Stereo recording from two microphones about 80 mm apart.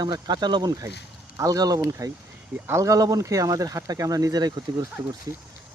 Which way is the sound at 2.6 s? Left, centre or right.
Right.